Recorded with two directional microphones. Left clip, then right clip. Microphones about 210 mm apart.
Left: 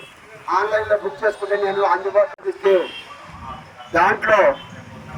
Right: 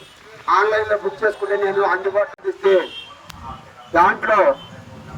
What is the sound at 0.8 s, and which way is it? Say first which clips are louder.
A man's voice: even; 25° right (ahead or behind).